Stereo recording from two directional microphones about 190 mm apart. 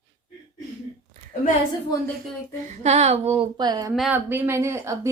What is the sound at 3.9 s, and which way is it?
Speech, centre (ahead or behind).